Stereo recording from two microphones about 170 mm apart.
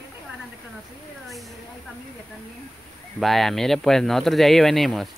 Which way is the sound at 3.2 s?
Centre (ahead or behind).